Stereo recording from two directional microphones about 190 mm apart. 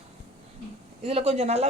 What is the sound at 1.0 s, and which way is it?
Speech, 35° right (ahead or behind).